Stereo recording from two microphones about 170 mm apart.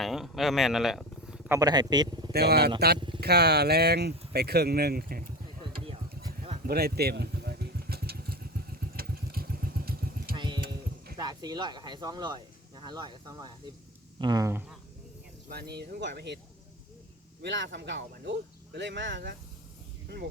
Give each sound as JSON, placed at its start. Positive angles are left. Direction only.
{"t": 0.0, "sound": "speech", "side_deg": 0}
{"t": 1.5, "sound": "a man's voice", "side_deg": -20}
{"t": 2.3, "sound": "speech", "side_deg": -70}
{"t": 6.7, "sound": "vehicle", "side_deg": -65}
{"t": 10.3, "sound": "keys jangling", "side_deg": -25}
{"t": 11.2, "sound": "speech", "side_deg": -25}
{"t": 15.4, "sound": "speech", "side_deg": -70}
{"t": 17.4, "sound": "speech", "side_deg": -90}